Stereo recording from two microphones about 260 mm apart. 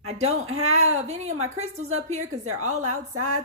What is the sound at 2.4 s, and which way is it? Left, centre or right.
Speech, right.